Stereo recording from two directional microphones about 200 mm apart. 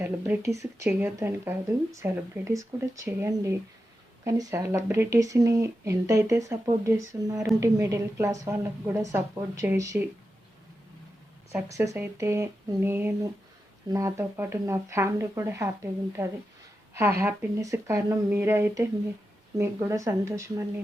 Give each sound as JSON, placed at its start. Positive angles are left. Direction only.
{"t": 0.0, "sound": "speech", "side_deg": -10}
{"t": 11.5, "sound": "speech", "side_deg": -15}